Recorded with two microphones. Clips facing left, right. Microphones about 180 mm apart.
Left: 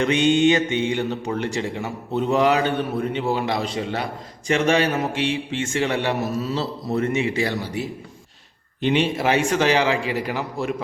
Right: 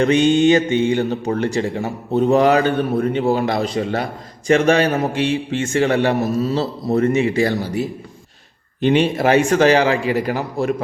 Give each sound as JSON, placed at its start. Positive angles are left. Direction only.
{"t": 0.0, "sound": "a man's voice", "side_deg": -40}